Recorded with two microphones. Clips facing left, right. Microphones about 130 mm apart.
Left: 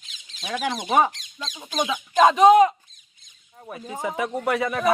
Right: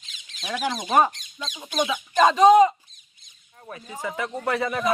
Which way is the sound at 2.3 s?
10° left (ahead or behind).